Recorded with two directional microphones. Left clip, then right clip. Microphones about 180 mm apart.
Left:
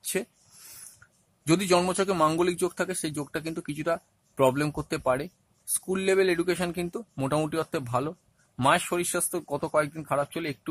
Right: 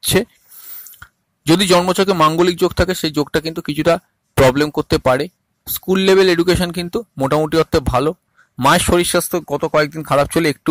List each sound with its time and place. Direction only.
0.0 s speech: 40° right (ahead or behind)
0.9 s a sound: 35° right (ahead or behind)
1.9 s speech: 35° right (ahead or behind)